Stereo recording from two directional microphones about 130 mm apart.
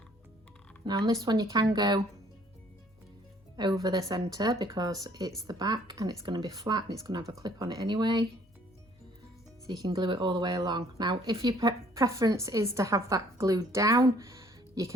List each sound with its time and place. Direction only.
0.9 s a woman's voice: 30° right (ahead or behind)
3.6 s a woman's voice: 30° right (ahead or behind)
9.6 s speech: 30° right (ahead or behind)